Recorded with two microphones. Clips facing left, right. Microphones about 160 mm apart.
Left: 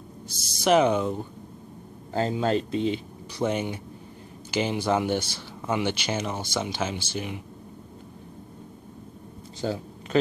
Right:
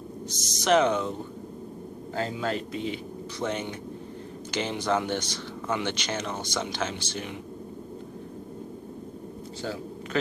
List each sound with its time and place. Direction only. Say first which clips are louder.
0.3 s speech: left 2 dB; 10° left (ahead or behind)
2.1 s speech: left 5 dB; 30° left (ahead or behind)
3.3 s speech: left 5 dB; 10° left (ahead or behind)
9.6 s speech: left 5 dB; 25° left (ahead or behind)